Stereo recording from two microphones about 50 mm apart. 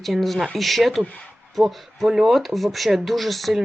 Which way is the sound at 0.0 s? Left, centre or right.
Centre.